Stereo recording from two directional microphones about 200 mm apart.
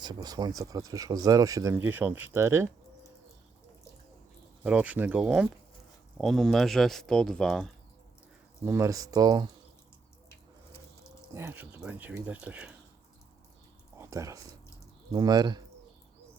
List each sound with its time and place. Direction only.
0.0 s speech: 20° right (ahead or behind)
4.6 s speech: 5° right (ahead or behind)
8.6 s speech: 15° right (ahead or behind)
10.2 s water: 15° left (ahead or behind)
11.3 s speech: 10° right (ahead or behind)
14.1 s speech: 15° right (ahead or behind)